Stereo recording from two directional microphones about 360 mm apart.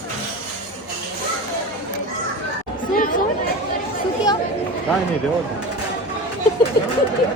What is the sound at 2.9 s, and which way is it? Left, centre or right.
Chatter, left.